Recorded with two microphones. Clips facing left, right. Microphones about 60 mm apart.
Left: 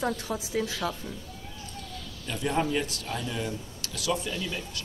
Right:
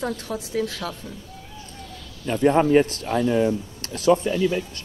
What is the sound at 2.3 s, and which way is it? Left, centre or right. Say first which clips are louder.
Speech: right 11 dB; right.